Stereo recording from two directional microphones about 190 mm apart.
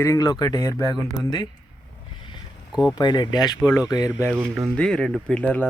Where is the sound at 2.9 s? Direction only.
25° left (ahead or behind).